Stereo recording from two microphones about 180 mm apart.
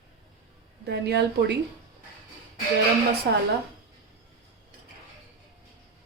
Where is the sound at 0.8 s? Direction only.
70° right (ahead or behind).